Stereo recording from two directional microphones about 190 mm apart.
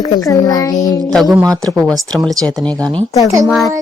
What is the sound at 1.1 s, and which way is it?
Speech, centre (ahead or behind).